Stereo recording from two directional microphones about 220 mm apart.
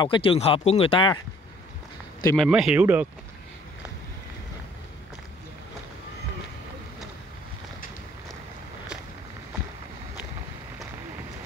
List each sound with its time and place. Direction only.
0.0 s speech: 25° left (ahead or behind)
2.3 s speech: centre (ahead or behind)